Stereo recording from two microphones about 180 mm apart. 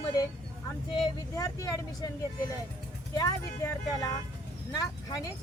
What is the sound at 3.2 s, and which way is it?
A woman's voice, 20° left (ahead or behind).